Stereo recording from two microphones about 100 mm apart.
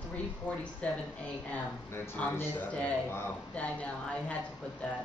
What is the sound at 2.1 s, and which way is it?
A woman's voice, 15° left (ahead or behind).